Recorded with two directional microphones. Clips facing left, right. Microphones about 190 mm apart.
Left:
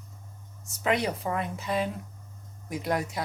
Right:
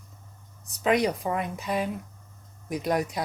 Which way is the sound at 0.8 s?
15° right (ahead or behind).